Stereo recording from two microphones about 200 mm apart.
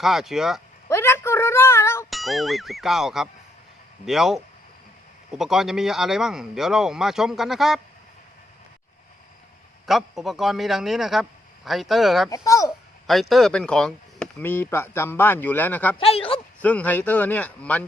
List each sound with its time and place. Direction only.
0.0 s a man's voice: centre (ahead or behind)
0.9 s music: 15° left (ahead or behind)
2.0 s a man's voice: centre (ahead or behind)
9.8 s a man's voice: centre (ahead or behind)
12.5 s speech: 15° left (ahead or behind)
13.1 s speech: centre (ahead or behind)
16.0 s speech: 30° left (ahead or behind)
16.6 s speech: 5° left (ahead or behind)